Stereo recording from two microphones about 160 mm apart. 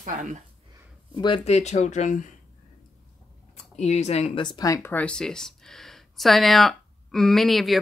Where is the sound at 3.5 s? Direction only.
45° left (ahead or behind).